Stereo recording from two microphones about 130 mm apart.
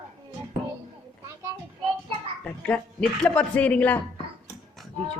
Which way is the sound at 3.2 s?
10° left (ahead or behind).